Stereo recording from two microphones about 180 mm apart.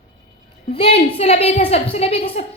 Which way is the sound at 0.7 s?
30° left (ahead or behind).